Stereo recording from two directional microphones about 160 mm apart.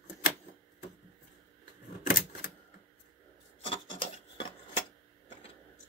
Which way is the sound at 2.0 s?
65° left (ahead or behind).